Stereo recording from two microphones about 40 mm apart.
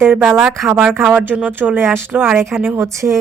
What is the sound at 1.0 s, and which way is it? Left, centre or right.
Speech, right.